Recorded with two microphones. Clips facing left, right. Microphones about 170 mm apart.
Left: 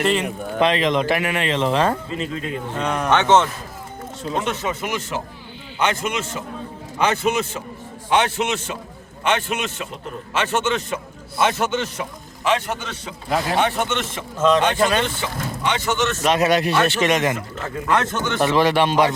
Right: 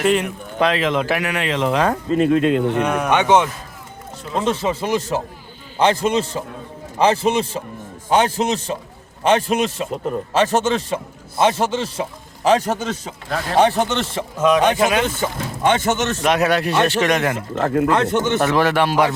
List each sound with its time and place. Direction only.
0.0 s speech: 5° right (ahead or behind)
2.0 s speech: 55° right (ahead or behind); by 2.7 s 75° right (ahead or behind)
2.7 s speech: 10° right (ahead or behind)
4.4 s a man's voice: 30° right (ahead or behind)
14.4 s speech: 10° right (ahead or behind)
15.0 s speech: 45° right (ahead or behind)
16.4 s speech: 15° left (ahead or behind)
17.8 s speech: 30° right (ahead or behind)
18.8 s speech: 5° right (ahead or behind)